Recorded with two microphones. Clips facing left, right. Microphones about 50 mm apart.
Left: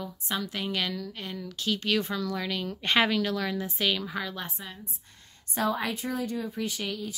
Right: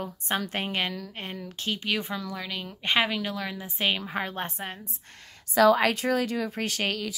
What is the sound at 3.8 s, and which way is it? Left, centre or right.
Speech, right.